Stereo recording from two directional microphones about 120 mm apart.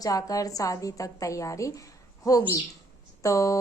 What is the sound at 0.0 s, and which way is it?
A woman's voice, 30° left (ahead or behind).